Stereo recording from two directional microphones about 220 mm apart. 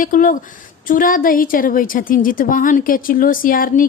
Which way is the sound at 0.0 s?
40° left (ahead or behind).